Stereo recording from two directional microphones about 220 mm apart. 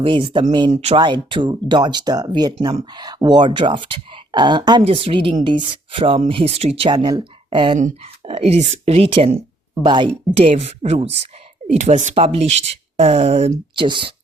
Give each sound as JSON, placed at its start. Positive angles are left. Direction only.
{"t": 0.0, "sound": "speech", "side_deg": -25}